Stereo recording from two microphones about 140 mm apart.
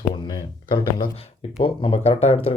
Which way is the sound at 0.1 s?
30° left (ahead or behind).